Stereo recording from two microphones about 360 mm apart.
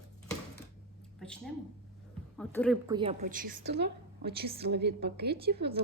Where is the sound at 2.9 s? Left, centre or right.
Centre.